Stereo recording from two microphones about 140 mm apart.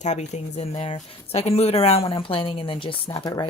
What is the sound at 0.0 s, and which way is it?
Speech, 55° left (ahead or behind).